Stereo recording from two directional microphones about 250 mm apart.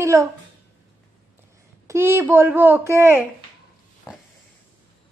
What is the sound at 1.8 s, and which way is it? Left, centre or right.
A woman's voice, centre.